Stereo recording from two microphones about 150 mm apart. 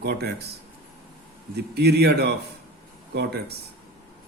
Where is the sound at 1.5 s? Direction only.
90° right.